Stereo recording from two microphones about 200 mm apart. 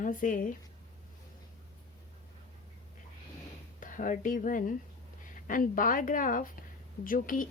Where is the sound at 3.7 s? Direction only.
40° left (ahead or behind).